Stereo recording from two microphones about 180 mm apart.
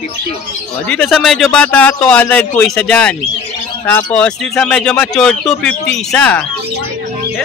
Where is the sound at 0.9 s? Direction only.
5° left (ahead or behind).